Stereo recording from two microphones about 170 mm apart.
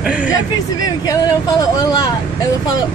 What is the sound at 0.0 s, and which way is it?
Speech, 5° right (ahead or behind).